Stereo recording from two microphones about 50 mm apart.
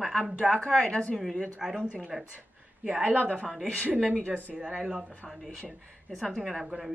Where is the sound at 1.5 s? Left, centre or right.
Centre.